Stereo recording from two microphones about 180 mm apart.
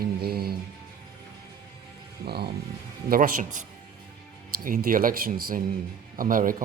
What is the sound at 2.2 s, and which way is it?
Speech, 60° right (ahead or behind).